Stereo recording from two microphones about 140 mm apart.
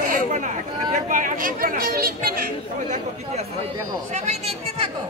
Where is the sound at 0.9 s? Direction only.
70° right (ahead or behind); by 2.4 s 90° right.